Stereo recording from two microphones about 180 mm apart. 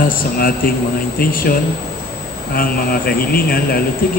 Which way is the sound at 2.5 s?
55° left (ahead or behind).